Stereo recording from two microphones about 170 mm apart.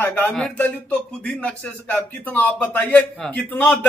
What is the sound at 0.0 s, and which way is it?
Speech, 10° left (ahead or behind).